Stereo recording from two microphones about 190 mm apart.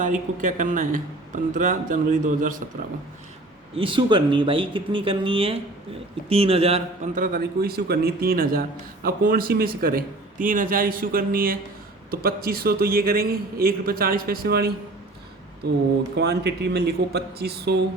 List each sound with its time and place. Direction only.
0.0 s a man's voice: 45° right (ahead or behind)
3.8 s a man's voice: 25° right (ahead or behind)
7.2 s a man's voice: 50° right (ahead or behind)